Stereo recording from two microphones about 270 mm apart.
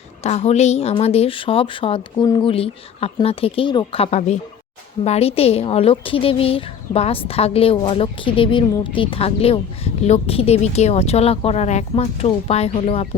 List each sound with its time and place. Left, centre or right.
0.2 s a woman's voice: left